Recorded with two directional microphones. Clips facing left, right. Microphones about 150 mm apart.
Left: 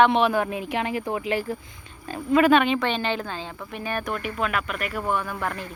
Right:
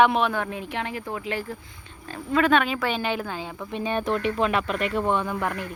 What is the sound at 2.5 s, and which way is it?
Speech, centre (ahead or behind).